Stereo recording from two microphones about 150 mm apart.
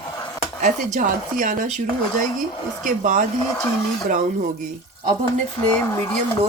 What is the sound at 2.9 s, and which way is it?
Speech, 60° right (ahead or behind).